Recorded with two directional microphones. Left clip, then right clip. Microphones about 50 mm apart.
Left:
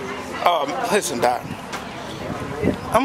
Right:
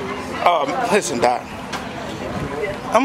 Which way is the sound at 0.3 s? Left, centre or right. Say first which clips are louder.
Right 2 dB; centre.